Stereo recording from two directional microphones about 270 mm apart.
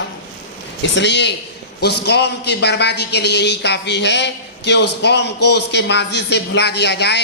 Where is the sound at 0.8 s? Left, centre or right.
Left.